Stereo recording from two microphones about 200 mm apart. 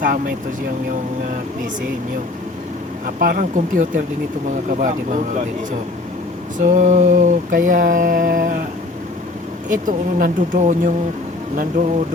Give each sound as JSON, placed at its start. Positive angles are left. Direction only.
{"t": 3.2, "sound": "speech", "side_deg": -45}
{"t": 4.7, "sound": "mantra", "side_deg": -40}
{"t": 6.7, "sound": "mantra", "side_deg": -40}
{"t": 9.6, "sound": "mantra", "side_deg": -40}